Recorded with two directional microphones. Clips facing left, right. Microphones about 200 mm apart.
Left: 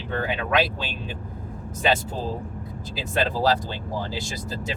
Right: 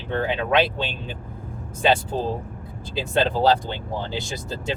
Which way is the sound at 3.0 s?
25° right (ahead or behind).